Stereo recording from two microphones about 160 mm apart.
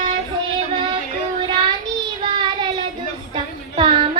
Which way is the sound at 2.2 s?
30° right (ahead or behind).